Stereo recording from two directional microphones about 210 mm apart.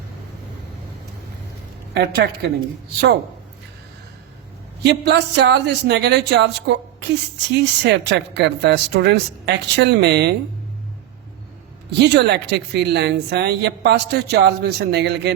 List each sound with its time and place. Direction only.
1.9 s a woman's voice: 50° right (ahead or behind)
4.8 s a man's voice: 55° right (ahead or behind)
11.9 s a man's voice: 50° right (ahead or behind)